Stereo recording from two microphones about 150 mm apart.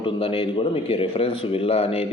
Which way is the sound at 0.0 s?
40° left (ahead or behind).